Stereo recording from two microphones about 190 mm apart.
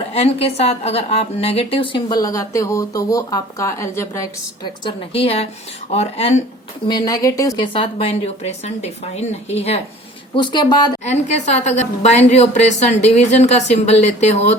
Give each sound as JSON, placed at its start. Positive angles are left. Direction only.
{"t": 0.1, "sound": "a woman's voice", "side_deg": 30}
{"t": 4.8, "sound": "a woman's voice", "side_deg": 30}
{"t": 6.8, "sound": "a woman's voice", "side_deg": 20}
{"t": 11.0, "sound": "a woman's voice", "side_deg": 35}